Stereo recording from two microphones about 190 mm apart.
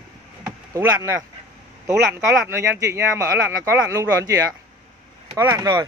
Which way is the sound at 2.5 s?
15° right (ahead or behind).